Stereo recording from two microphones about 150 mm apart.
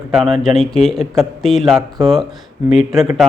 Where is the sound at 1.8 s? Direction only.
25° right (ahead or behind).